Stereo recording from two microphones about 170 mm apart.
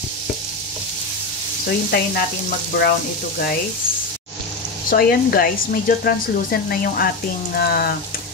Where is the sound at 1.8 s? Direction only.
60° left (ahead or behind).